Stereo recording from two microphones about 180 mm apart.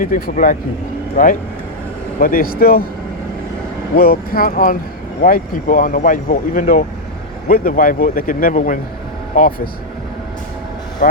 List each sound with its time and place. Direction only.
0.0 s speech: 50° left (ahead or behind)
3.9 s speech: 55° left (ahead or behind)
11.0 s speech: 45° left (ahead or behind)